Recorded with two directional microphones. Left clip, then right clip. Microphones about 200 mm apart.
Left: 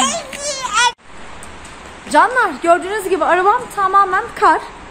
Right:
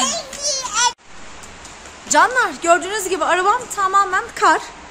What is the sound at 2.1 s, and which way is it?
A woman's voice, centre (ahead or behind).